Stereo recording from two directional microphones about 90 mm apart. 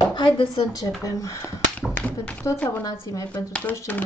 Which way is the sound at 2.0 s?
15° left (ahead or behind).